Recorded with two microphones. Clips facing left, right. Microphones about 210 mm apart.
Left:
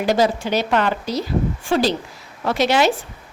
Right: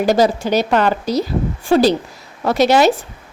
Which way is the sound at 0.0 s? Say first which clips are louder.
Right 4 dB; 40° right (ahead or behind).